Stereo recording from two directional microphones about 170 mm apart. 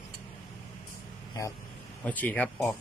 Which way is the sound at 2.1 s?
10° left (ahead or behind).